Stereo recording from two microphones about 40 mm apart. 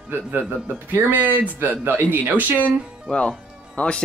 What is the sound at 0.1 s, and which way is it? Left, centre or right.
A man's voice, right.